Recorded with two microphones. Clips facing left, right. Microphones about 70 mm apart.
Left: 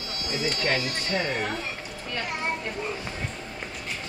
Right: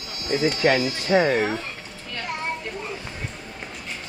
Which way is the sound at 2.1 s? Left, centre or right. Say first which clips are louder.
Right 1 dB; centre.